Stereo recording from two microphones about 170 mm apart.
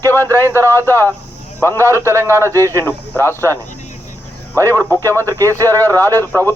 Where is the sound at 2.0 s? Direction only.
15° right (ahead or behind).